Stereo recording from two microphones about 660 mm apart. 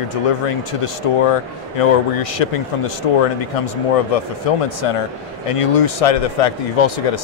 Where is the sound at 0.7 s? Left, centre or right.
Left.